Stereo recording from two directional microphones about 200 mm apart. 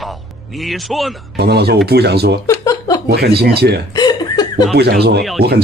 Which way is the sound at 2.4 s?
15° left (ahead or behind).